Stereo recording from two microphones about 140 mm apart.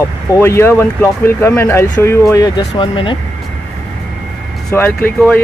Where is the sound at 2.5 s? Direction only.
35° left (ahead or behind).